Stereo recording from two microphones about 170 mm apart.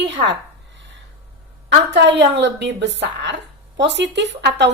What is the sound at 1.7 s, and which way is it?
A woman's voice, 85° right.